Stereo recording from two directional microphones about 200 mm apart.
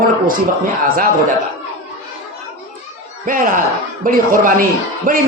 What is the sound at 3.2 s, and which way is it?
A man's voice, 40° right (ahead or behind).